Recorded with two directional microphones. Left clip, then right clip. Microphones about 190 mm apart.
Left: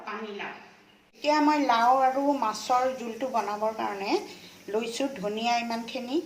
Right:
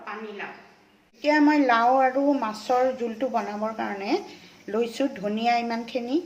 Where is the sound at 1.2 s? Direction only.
40° right (ahead or behind).